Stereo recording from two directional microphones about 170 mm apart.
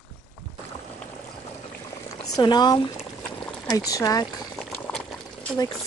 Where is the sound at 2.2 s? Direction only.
25° left (ahead or behind).